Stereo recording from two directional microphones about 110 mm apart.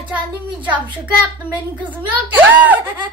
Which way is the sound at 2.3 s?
15° right (ahead or behind).